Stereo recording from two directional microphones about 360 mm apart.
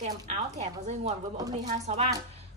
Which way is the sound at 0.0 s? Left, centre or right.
Centre.